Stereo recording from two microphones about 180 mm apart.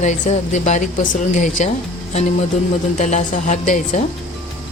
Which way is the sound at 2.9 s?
40° left (ahead or behind).